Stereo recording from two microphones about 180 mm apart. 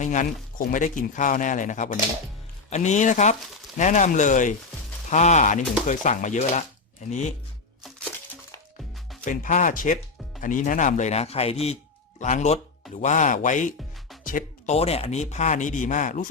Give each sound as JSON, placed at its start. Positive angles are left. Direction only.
{"t": 0.0, "sound": "speech", "side_deg": 45}
{"t": 9.2, "sound": "speech", "side_deg": 45}
{"t": 14.3, "sound": "music", "side_deg": 50}
{"t": 14.8, "sound": "speech", "side_deg": 35}